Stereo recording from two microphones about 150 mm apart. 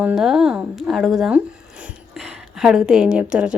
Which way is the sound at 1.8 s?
5° right (ahead or behind).